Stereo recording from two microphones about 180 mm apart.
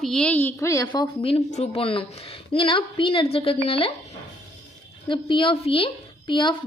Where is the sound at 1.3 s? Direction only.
35° left (ahead or behind).